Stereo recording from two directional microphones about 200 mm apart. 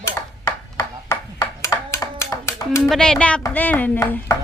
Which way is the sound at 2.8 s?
5° left (ahead or behind).